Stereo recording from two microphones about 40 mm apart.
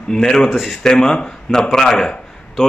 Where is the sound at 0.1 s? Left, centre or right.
Centre.